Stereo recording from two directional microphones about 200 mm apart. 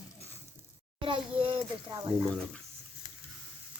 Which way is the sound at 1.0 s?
25° right (ahead or behind).